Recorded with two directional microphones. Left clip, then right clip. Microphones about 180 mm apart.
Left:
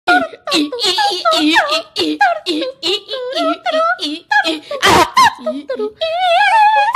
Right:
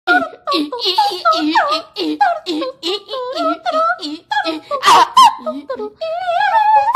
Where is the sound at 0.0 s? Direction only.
20° left (ahead or behind).